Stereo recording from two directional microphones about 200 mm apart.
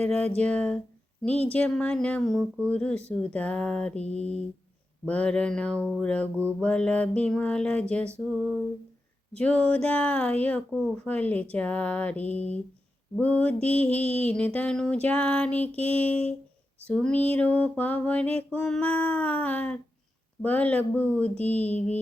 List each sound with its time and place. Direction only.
0.0 s speech: 5° left (ahead or behind)
3.9 s mantra: 30° left (ahead or behind)
5.0 s speech: 5° left (ahead or behind)
9.3 s speech: 5° left (ahead or behind)